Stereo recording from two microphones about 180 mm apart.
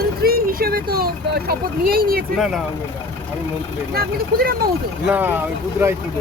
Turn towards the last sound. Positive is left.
turn(degrees=-10)  # may be behind; listen again after turning